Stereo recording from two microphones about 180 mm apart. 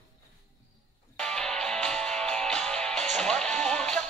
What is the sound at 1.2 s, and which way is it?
Music, 5° left (ahead or behind).